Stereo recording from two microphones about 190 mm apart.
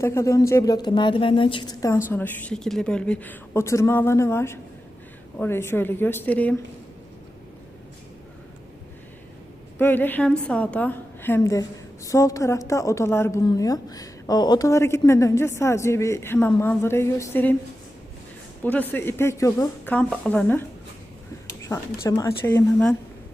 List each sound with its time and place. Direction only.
0.0 s a woman's voice: 15° left (ahead or behind)
9.7 s a woman's voice: 10° left (ahead or behind)
18.6 s a woman's voice: 10° left (ahead or behind)
21.7 s a woman's voice: 10° left (ahead or behind)